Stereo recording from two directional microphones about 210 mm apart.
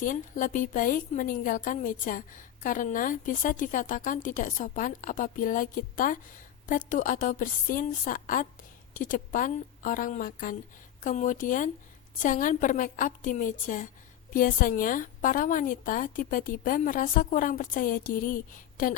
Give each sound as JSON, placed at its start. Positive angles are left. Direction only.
{"t": 0.0, "sound": "a woman's voice", "side_deg": 40}